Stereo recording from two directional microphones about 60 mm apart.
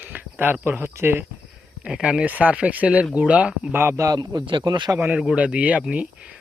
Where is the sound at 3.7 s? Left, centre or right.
Right.